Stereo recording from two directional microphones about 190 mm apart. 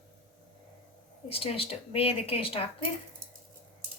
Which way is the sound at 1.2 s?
30° left (ahead or behind).